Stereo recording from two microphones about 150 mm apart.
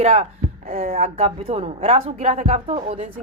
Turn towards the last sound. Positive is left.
turn(degrees=-40)  # may be behind; listen again after turning